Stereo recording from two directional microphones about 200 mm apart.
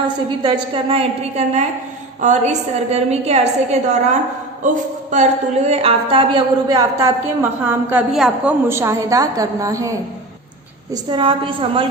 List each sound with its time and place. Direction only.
0.4 s a woman's voice: 25° right (ahead or behind)
10.9 s a woman's voice: 25° right (ahead or behind)